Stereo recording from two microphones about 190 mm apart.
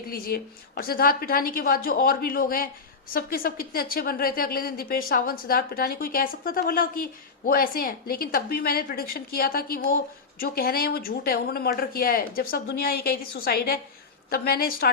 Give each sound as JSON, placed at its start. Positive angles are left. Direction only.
{"t": 0.1, "sound": "a woman's voice", "side_deg": 50}